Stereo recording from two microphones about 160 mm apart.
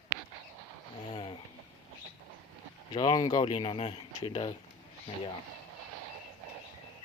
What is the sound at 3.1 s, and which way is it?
Speech, 25° left (ahead or behind).